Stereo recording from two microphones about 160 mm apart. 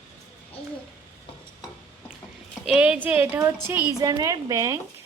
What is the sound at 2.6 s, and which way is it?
A woman's voice, 5° right (ahead or behind).